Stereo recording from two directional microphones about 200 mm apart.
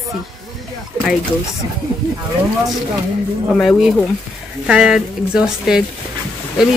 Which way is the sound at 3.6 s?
Centre (ahead or behind).